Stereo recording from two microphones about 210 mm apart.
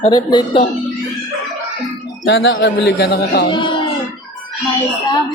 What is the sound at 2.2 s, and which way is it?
A man's voice, 60° left (ahead or behind).